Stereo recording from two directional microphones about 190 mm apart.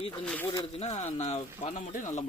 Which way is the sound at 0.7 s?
35° left (ahead or behind).